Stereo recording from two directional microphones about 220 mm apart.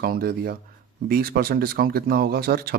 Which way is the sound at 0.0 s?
45° right (ahead or behind).